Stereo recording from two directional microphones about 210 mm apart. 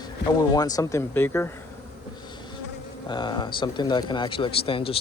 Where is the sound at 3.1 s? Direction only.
20° left (ahead or behind).